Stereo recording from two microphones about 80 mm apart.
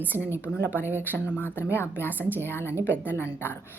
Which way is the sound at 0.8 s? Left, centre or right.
Left.